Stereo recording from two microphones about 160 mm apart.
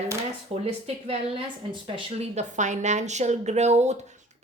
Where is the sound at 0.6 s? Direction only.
35° right (ahead or behind).